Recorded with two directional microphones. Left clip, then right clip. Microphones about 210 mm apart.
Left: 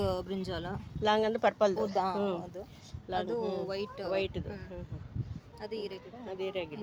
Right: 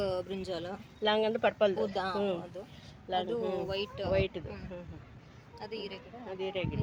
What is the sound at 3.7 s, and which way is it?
Speech, 45° left (ahead or behind).